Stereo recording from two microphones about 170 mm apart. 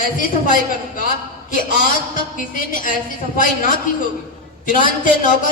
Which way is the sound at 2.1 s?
50° left (ahead or behind).